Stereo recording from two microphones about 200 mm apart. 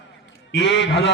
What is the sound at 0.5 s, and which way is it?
Speech, 65° left (ahead or behind).